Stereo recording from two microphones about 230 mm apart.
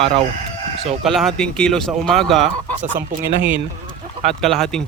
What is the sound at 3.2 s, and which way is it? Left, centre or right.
Speech, centre.